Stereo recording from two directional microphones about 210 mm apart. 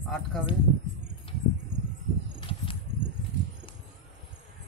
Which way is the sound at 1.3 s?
25° left (ahead or behind).